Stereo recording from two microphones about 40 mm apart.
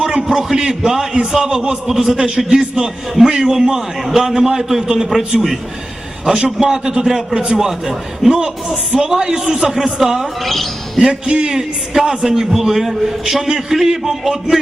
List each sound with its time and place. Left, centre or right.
0.3 s a man's voice: centre
6.6 s a man's voice: centre
7.0 s a man's voice: centre
7.3 s a man's voice: centre
10.4 s a man's voice: centre
10.9 s a man's voice: centre